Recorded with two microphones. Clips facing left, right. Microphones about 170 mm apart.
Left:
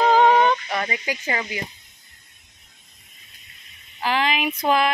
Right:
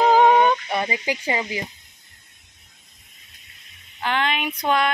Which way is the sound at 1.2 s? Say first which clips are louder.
Right 2 dB; 20° right (ahead or behind).